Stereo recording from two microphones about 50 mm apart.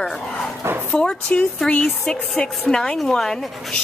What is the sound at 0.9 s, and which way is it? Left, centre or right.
Speech, left.